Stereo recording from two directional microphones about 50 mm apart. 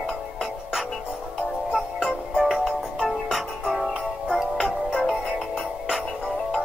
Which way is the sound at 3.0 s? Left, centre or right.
Centre.